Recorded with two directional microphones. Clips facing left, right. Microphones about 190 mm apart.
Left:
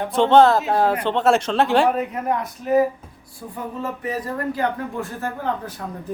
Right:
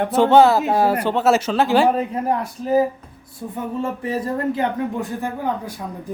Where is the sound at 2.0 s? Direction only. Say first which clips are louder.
Right 2 dB; 30° right (ahead or behind); by 5.7 s 15° right (ahead or behind).